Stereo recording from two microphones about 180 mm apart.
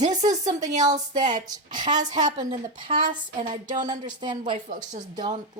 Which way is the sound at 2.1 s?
25° right (ahead or behind).